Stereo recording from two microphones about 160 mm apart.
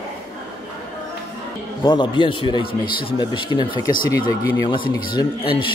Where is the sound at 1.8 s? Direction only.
30° left (ahead or behind).